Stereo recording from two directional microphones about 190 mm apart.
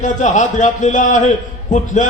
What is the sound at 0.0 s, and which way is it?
A man's voice, 40° left (ahead or behind).